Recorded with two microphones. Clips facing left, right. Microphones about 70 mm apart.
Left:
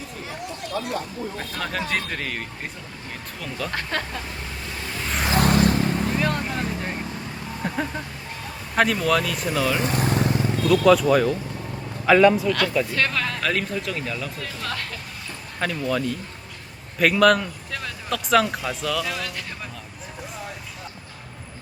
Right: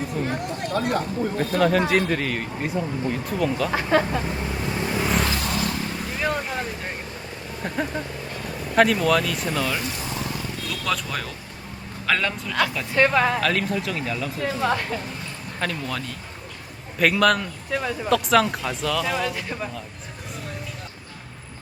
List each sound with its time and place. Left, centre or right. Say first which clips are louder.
0.3 s speech: right 5 dB; right
1.4 s speech: right 11 dB; centre
5.4 s vehicle: left 8 dB; left
6.1 s speech: left 1 dB; centre
9.8 s vehicle: left 7 dB; left
10.7 s a man's voice: left 13 dB; centre
12.5 s speech: left 1 dB; centre
12.9 s speech: right 6 dB; right
13.4 s speech: right 2 dB; centre
14.4 s speech: right 8 dB; centre
15.6 s speech: left 4 dB; centre
17.7 s speech: right 7 dB; centre
18.1 s speech: right 1 dB; centre